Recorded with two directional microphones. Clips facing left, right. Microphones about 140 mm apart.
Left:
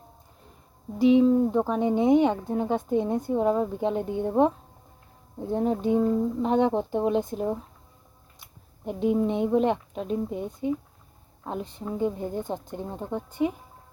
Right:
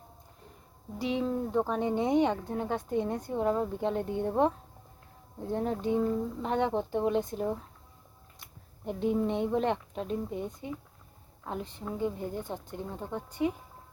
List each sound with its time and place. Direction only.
0.9 s speech: 20° left (ahead or behind)
13.0 s speech: 15° left (ahead or behind)